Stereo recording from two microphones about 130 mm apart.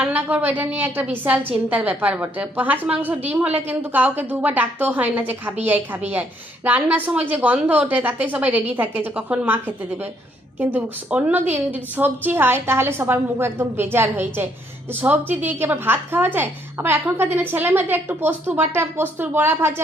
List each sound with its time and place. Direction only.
0.0 s a woman's voice: 15° right (ahead or behind)